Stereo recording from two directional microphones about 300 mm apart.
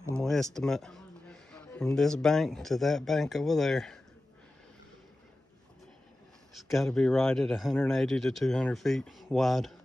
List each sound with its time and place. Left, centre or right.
0.1 s a man's voice: centre
6.5 s speech: centre